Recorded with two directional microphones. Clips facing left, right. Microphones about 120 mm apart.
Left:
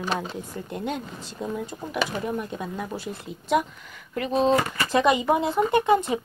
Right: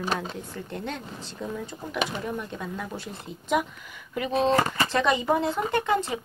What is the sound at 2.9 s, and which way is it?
Speech, 5° left (ahead or behind).